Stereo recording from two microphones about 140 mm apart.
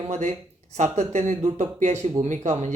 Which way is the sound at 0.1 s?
55° right (ahead or behind).